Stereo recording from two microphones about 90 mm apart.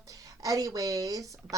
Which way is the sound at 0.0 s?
40° right (ahead or behind).